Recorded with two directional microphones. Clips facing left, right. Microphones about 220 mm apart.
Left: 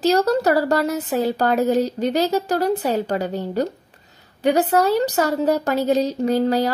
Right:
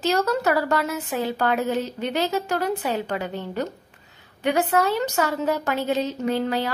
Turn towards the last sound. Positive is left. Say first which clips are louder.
# left 5 dB
turn(degrees=40)  # may be behind; listen again after turning